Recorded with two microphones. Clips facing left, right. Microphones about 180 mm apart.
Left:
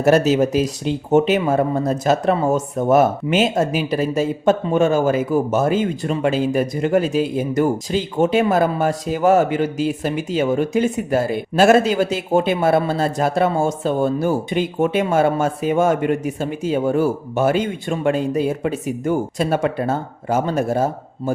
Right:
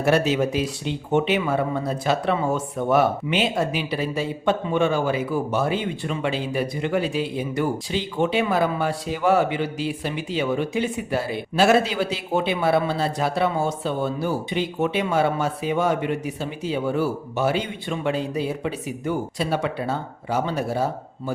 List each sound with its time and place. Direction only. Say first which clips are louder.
0.0 s speech: left 5 dB; 40° left (ahead or behind)